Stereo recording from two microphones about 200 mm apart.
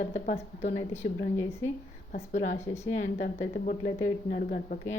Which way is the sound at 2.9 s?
40° left (ahead or behind).